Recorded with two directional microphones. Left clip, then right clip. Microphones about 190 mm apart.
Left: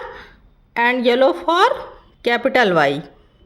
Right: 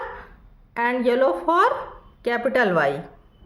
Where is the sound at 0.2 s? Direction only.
35° left (ahead or behind).